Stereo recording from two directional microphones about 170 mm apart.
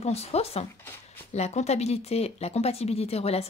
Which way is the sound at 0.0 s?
35° left (ahead or behind).